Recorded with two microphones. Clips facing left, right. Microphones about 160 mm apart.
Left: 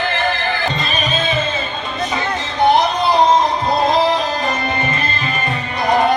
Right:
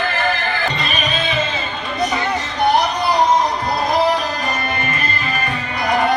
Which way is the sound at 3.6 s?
25° left (ahead or behind).